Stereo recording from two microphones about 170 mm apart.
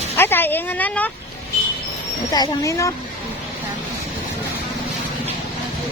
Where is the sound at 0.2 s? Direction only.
10° left (ahead or behind).